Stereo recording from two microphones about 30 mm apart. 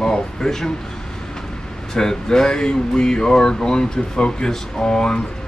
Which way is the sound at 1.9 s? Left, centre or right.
Centre.